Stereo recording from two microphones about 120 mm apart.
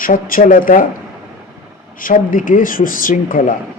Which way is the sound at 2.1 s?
90° left.